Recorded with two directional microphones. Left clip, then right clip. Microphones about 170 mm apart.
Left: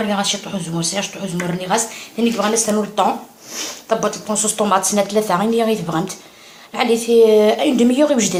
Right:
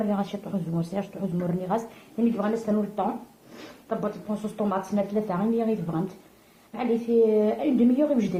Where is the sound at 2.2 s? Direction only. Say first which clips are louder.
Left 9 dB; 15° left (ahead or behind).